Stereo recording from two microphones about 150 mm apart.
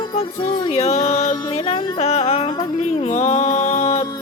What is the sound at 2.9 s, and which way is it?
Music, 50° left (ahead or behind).